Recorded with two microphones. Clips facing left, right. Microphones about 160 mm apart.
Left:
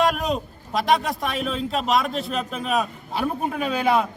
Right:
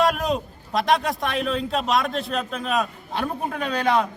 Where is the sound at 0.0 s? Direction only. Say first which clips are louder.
Even; centre (ahead or behind).